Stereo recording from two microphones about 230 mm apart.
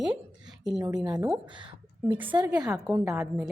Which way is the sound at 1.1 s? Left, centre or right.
Centre.